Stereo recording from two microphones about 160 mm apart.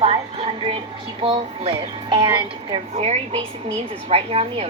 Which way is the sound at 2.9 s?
40° right (ahead or behind).